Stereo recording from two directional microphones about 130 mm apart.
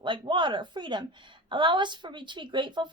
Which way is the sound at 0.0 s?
40° right (ahead or behind).